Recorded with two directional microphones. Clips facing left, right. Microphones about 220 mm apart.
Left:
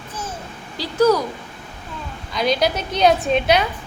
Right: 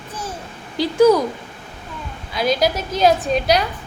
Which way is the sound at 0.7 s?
15° right (ahead or behind).